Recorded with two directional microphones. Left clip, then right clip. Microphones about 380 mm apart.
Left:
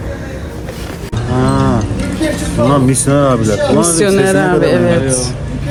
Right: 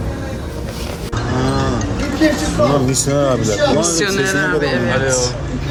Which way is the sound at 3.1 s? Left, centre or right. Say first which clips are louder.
Left 4 dB; left.